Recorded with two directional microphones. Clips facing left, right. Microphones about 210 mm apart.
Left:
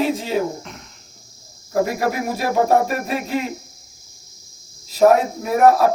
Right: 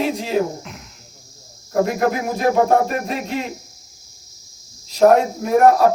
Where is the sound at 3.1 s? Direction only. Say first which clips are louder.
Left 1 dB; centre (ahead or behind).